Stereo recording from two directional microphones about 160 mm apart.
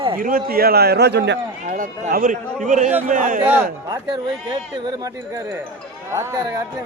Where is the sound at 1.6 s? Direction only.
55° right (ahead or behind).